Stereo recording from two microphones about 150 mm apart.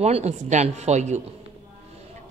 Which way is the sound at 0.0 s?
45° right (ahead or behind).